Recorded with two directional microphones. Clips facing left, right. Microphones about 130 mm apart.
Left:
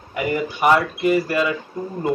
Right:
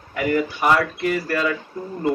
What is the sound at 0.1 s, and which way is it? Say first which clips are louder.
Speech: right 2 dB; 20° left (ahead or behind).